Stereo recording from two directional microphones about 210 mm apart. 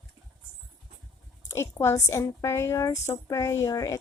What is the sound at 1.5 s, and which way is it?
A woman's voice, 15° left (ahead or behind).